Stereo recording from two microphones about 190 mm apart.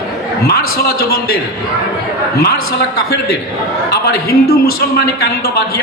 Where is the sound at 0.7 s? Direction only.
55° left (ahead or behind).